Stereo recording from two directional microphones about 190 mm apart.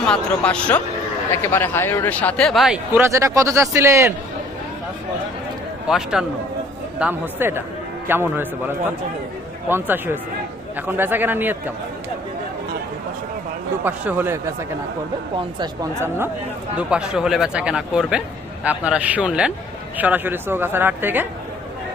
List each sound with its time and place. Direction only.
0.0 s speech: 5° left (ahead or behind); by 4.1 s 15° right (ahead or behind)
5.9 s speech: 5° right (ahead or behind)
13.8 s speech: 10° right (ahead or behind)
15.4 s speech: 20° right (ahead or behind)